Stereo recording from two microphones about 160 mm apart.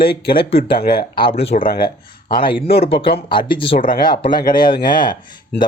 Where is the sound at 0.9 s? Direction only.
30° left (ahead or behind).